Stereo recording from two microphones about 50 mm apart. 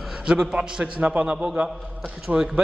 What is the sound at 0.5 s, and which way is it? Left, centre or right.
A man's voice, centre.